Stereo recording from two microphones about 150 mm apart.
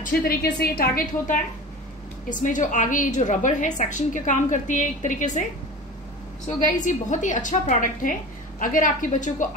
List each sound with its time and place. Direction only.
0.0 s a woman's voice: 90° left
2.2 s a woman's voice: 60° left (ahead or behind)
6.4 s a woman's voice: 55° left (ahead or behind)